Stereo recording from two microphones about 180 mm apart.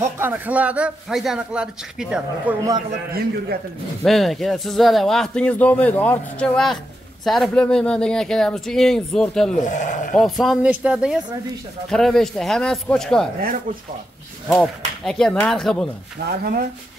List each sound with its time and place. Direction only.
0.0 s a man's voice: 10° right (ahead or behind)
4.0 s speech: centre (ahead or behind)
9.6 s speech: 45° left (ahead or behind)
10.1 s speech: centre (ahead or behind)
15.0 s speech: 5° left (ahead or behind)
16.3 s speech: 55° right (ahead or behind)